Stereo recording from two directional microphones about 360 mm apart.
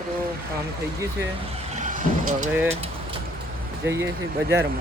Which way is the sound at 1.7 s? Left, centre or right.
Right.